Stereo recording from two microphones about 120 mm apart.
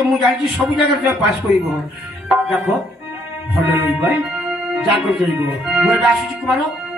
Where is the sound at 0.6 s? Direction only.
5° right (ahead or behind).